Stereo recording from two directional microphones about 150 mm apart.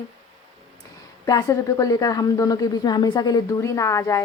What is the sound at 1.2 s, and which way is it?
A woman's voice, 20° left (ahead or behind).